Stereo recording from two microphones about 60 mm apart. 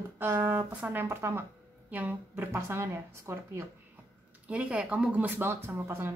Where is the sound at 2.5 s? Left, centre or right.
Right.